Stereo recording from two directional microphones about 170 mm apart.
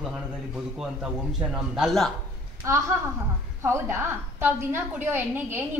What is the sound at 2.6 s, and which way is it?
A woman's voice, 15° right (ahead or behind).